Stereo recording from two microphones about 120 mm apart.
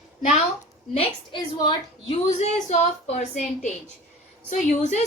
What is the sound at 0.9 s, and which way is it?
A woman's voice, 50° left (ahead or behind).